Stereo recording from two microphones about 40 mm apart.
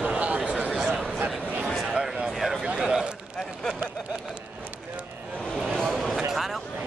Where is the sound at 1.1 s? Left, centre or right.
Right.